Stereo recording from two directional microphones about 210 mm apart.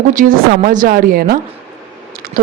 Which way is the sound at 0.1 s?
40° right (ahead or behind).